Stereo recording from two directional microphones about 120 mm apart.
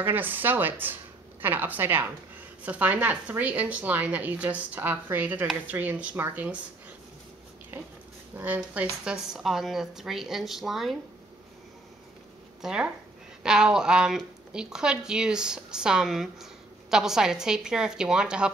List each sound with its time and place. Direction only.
0.0 s a woman's voice: 15° right (ahead or behind)
7.7 s a woman's voice: 15° right (ahead or behind); by 11.0 s centre (ahead or behind)
12.6 s a woman's voice: 10° right (ahead or behind)